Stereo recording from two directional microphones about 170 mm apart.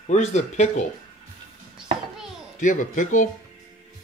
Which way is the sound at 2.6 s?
50° left (ahead or behind).